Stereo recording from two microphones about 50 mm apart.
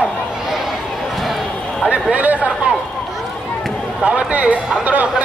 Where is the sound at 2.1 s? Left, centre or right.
Right.